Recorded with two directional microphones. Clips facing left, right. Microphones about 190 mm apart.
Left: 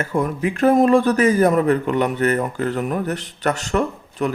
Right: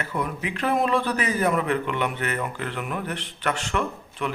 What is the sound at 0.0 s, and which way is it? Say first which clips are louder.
A man's voice: left 8 dB; 45° left (ahead or behind).